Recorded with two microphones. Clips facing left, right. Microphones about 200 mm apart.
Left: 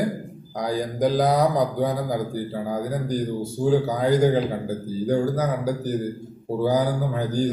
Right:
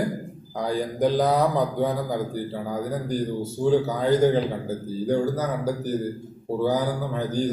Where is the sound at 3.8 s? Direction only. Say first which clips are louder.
Even; 10° left (ahead or behind).